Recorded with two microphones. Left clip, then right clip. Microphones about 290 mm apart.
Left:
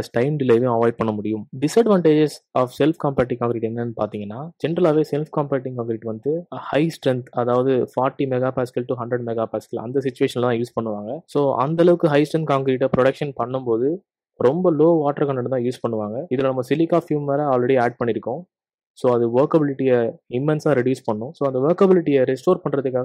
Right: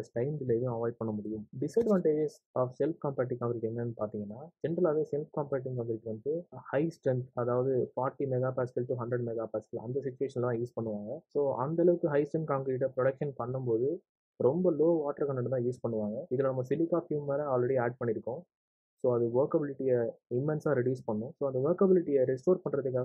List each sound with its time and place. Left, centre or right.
0.1 s speech: left
6.7 s speech: left